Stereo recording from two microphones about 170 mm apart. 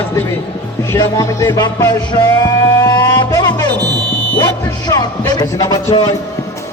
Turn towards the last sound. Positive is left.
turn(degrees=25)  # may be behind; listen again after turning